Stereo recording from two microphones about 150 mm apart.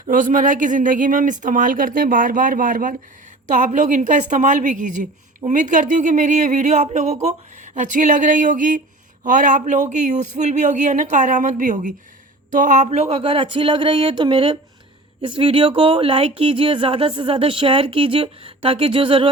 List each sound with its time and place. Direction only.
0.0 s speech: 60° right (ahead or behind); by 19.3 s 35° right (ahead or behind)